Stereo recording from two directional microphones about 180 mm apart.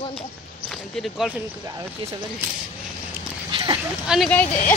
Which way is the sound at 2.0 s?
30° right (ahead or behind).